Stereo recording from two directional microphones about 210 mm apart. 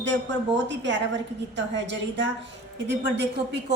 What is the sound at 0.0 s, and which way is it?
A woman's voice, 60° right (ahead or behind).